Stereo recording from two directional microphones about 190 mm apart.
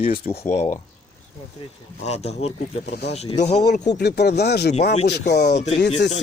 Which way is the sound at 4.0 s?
60° left (ahead or behind).